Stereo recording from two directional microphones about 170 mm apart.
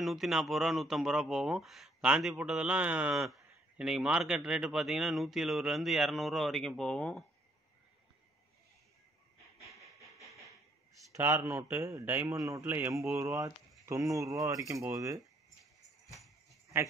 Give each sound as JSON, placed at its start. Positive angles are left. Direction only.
{"t": 0.0, "sound": "speech", "side_deg": 0}
{"t": 11.1, "sound": "a man's voice", "side_deg": -15}